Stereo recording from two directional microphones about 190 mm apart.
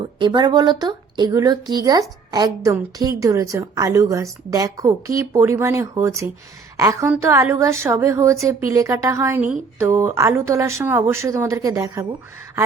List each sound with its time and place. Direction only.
0.0 s a woman's voice: 25° right (ahead or behind)